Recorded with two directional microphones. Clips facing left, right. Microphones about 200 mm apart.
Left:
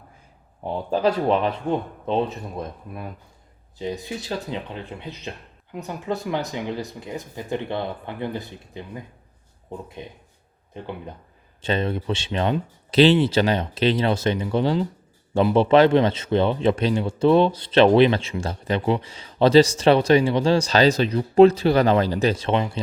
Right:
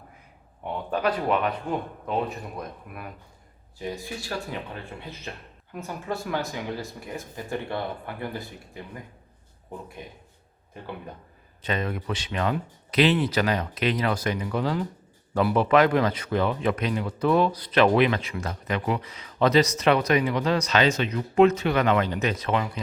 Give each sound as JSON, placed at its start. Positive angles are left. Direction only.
{"t": 0.6, "sound": "speech", "side_deg": 30}
{"t": 11.6, "sound": "speech", "side_deg": 30}